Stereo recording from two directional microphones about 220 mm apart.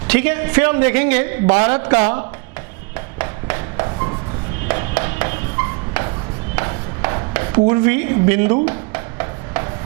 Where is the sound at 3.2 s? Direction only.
15° right (ahead or behind).